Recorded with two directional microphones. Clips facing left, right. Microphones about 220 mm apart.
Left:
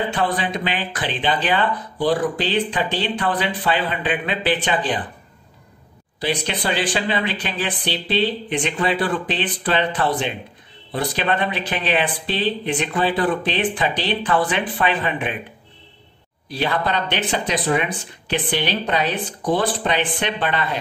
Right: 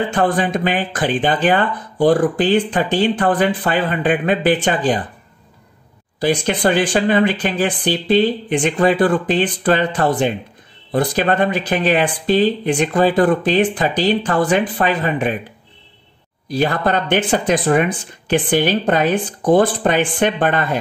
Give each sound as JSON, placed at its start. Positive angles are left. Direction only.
{"t": 0.1, "sound": "speech", "side_deg": -50}
{"t": 6.1, "sound": "speech", "side_deg": -50}
{"t": 16.4, "sound": "speech", "side_deg": -45}